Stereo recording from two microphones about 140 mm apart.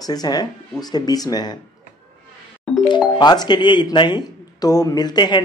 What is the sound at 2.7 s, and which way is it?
Music, centre (ahead or behind).